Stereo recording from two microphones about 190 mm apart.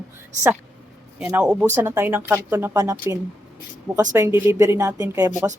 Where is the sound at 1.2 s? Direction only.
5° right (ahead or behind).